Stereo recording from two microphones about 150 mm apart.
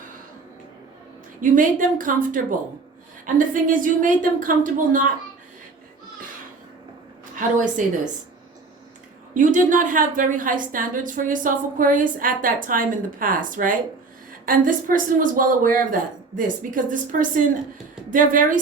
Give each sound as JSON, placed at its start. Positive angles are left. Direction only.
{"t": 1.4, "sound": "a woman's voice", "side_deg": -60}
{"t": 7.3, "sound": "a woman's voice", "side_deg": -60}
{"t": 9.3, "sound": "a woman's voice", "side_deg": -60}